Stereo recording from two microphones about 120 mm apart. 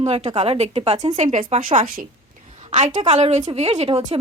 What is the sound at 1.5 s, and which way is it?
Speech, 70° right (ahead or behind).